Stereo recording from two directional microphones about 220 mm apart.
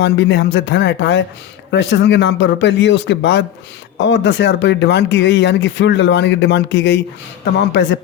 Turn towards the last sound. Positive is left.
turn(degrees=50)  # may be behind; listen again after turning